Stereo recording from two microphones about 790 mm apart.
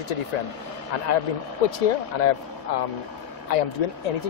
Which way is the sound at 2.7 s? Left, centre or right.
Left.